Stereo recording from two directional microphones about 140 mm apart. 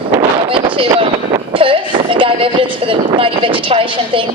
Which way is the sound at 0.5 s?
40° right (ahead or behind).